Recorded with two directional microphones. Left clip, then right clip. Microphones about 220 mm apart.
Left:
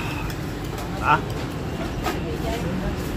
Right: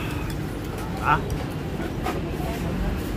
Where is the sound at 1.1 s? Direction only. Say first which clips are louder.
Left 2 dB; centre (ahead or behind).